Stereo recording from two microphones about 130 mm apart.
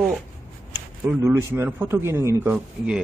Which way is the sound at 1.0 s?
20° right (ahead or behind).